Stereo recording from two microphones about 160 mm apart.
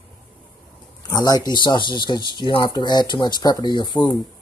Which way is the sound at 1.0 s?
25° left (ahead or behind).